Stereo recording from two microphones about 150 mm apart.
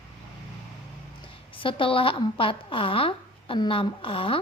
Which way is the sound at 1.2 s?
35° left (ahead or behind).